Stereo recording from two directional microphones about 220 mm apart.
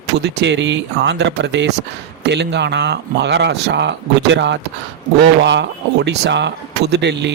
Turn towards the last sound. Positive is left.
turn(degrees=-50)  # may be behind; listen again after turning